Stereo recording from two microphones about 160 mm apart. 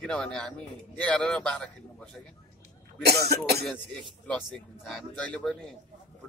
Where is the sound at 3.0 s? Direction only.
85° right.